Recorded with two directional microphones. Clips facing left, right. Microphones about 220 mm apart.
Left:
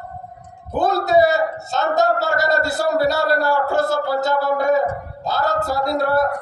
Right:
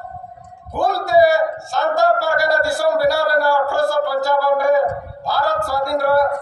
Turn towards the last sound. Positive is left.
turn(degrees=20)  # may be behind; listen again after turning